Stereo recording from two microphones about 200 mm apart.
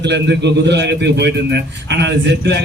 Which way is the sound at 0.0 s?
60° right (ahead or behind).